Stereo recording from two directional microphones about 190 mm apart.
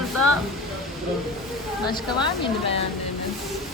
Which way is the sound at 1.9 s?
25° left (ahead or behind).